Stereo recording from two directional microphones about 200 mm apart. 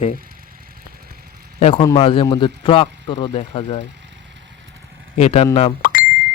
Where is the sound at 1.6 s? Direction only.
30° left (ahead or behind).